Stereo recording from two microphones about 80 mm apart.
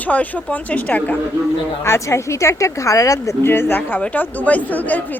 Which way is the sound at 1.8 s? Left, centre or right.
Left.